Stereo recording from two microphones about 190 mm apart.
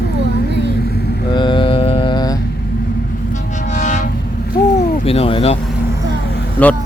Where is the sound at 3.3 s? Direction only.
40° left (ahead or behind).